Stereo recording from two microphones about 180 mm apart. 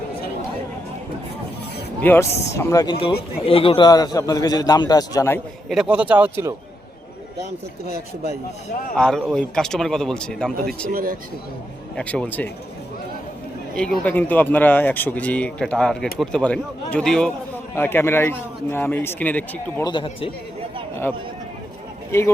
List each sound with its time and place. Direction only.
2.0 s a man's voice: 10° left (ahead or behind)
5.6 s speech: centre (ahead or behind)
9.0 s speech: 5° left (ahead or behind)
10.9 s speech: 50° right (ahead or behind)
11.9 s speech: 5° left (ahead or behind)
13.7 s speech: 5° left (ahead or behind)
19.8 s a man's voice: 25° left (ahead or behind)
22.1 s speech: 15° left (ahead or behind)